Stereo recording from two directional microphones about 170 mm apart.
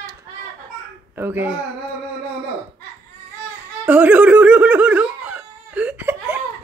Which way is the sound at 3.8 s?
10° right (ahead or behind).